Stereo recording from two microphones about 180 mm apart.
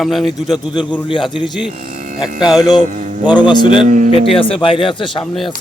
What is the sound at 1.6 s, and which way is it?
Cattle, 50° right (ahead or behind).